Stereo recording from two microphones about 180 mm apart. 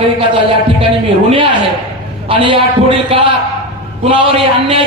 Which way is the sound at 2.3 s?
30° right (ahead or behind).